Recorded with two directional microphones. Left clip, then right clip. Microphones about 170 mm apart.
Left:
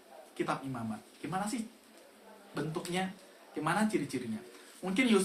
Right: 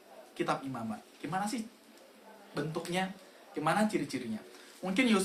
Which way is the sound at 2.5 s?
20° right (ahead or behind).